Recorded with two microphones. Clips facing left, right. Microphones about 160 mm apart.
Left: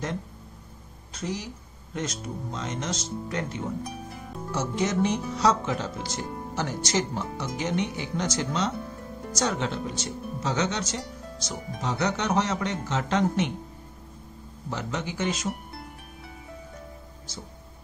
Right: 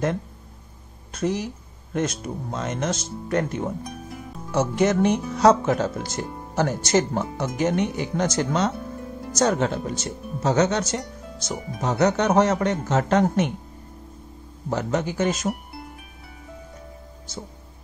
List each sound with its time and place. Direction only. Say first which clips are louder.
1.1 s a woman's voice: right 8 dB; 55° right (ahead or behind)
14.7 s speech: right 7 dB; 45° right (ahead or behind)